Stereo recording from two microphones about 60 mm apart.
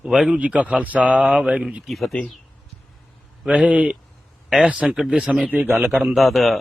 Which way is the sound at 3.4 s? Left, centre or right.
Right.